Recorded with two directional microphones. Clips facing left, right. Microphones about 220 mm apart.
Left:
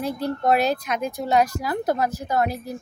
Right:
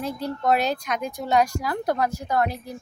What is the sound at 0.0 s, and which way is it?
Speech, 10° left (ahead or behind).